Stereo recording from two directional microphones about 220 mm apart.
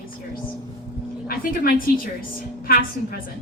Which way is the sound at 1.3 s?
40° left (ahead or behind).